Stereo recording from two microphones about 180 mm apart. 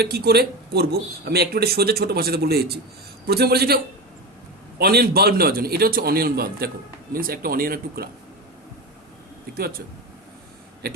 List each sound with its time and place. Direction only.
0.0 s speech: 60° right (ahead or behind)
4.8 s speech: 60° right (ahead or behind)
9.6 s speech: 55° right (ahead or behind)
10.8 s a sound: 60° right (ahead or behind)